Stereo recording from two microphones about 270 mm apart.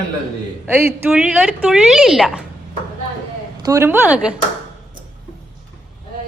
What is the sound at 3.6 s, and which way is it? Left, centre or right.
Speech, centre.